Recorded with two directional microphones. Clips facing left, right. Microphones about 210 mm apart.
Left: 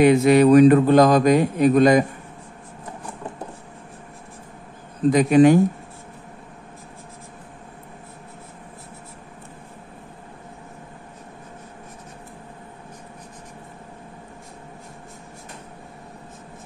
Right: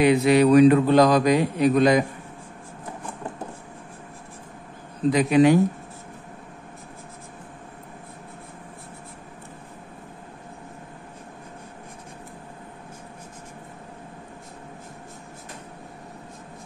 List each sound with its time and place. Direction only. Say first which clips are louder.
0.0 s a man's voice: left 3 dB; 45° left (ahead or behind)
5.1 s a man's voice: left 3 dB; 45° left (ahead or behind)